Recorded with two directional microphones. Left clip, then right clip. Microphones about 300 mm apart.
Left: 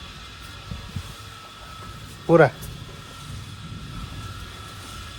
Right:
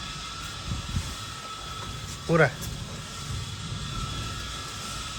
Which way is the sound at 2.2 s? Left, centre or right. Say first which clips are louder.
Left 7 dB; centre.